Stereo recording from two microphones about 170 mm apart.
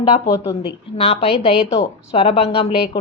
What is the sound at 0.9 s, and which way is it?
Speech, 35° left (ahead or behind).